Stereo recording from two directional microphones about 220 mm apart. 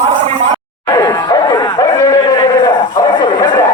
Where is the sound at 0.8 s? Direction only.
15° left (ahead or behind).